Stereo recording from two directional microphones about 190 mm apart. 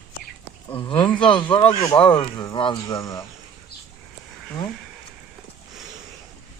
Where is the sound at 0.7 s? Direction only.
25° left (ahead or behind).